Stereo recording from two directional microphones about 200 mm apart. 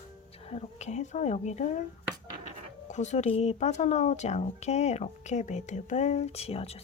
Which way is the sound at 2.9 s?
35° left (ahead or behind).